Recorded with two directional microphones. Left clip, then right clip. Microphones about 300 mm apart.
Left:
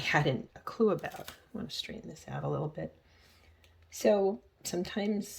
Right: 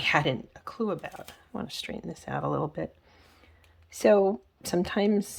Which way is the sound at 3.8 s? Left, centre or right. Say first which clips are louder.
Right 6 dB; centre.